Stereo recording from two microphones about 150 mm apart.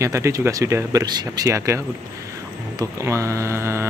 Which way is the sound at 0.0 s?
20° right (ahead or behind).